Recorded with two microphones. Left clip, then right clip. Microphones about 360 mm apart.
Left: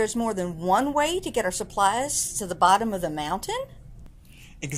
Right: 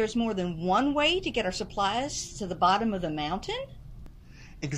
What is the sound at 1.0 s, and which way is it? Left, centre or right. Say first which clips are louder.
A woman's voice: left 2 dB; centre.